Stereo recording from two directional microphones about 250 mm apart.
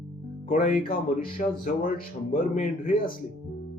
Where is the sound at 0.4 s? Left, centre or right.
Left.